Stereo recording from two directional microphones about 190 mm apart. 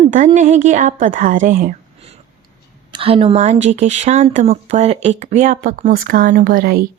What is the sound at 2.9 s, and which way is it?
Speech, 30° right (ahead or behind).